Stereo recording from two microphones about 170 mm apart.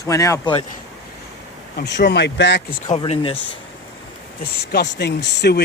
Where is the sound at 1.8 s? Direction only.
85° left.